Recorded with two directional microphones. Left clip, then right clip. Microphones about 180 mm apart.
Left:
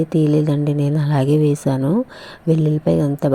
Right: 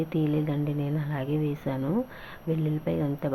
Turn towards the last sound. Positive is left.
turn(degrees=50)  # may be behind; listen again after turning